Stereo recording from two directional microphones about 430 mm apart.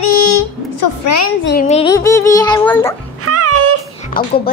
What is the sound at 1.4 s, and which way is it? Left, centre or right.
A child's voice, left.